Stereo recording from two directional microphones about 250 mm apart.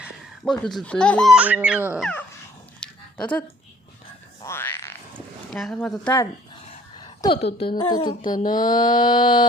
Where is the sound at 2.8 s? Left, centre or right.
Centre.